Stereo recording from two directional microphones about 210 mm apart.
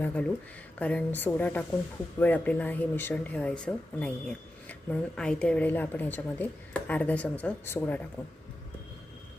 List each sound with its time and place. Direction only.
0.0 s speech: 5° left (ahead or behind)